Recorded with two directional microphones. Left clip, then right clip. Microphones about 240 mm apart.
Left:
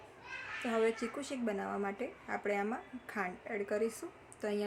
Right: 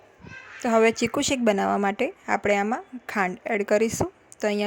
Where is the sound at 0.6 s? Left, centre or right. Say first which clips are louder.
Right 13 dB; right.